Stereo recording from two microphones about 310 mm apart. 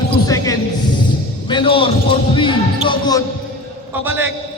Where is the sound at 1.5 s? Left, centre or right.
Centre.